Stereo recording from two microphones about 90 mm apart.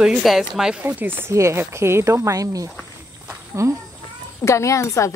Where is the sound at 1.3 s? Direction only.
30° right (ahead or behind).